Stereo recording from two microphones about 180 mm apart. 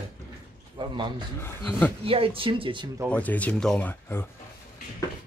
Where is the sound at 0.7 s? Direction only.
25° right (ahead or behind).